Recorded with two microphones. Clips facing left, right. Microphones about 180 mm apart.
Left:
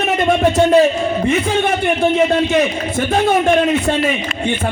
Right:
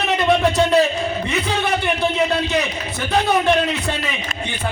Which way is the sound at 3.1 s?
45° left (ahead or behind).